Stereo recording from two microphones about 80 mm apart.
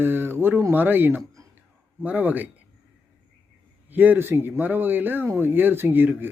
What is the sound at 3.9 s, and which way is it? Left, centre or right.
Speech, right.